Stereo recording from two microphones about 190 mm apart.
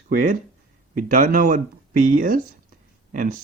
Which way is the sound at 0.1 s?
45° right (ahead or behind).